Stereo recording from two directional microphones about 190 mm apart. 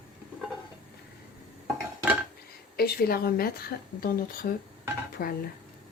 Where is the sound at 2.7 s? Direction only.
55° left (ahead or behind).